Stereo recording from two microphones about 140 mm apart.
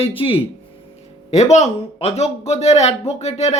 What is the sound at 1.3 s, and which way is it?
Speech, 55° left (ahead or behind).